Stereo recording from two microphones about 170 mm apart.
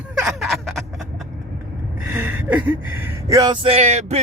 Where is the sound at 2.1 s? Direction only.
10° right (ahead or behind).